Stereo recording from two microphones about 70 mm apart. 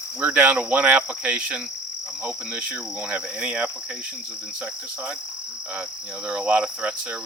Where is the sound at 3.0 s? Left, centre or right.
Centre.